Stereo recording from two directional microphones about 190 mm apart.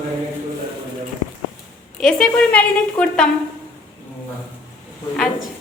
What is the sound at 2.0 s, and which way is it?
A woman's voice, 5° left (ahead or behind).